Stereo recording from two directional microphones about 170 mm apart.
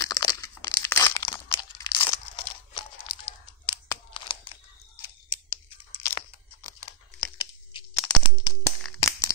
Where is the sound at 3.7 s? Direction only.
25° left (ahead or behind).